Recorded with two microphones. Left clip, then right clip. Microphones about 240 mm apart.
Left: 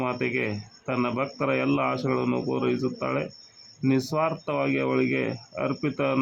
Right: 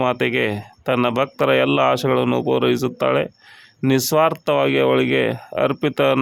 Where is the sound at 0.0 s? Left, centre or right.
Right.